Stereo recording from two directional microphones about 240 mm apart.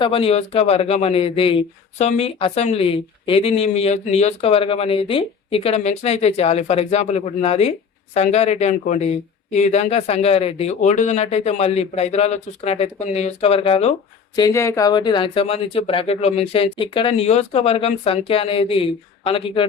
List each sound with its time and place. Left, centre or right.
0.0 s speech: left